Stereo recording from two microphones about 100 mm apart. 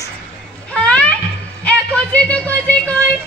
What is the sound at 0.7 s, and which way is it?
Music, 10° left (ahead or behind).